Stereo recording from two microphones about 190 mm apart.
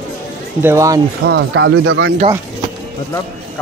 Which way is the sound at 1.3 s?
75° right (ahead or behind).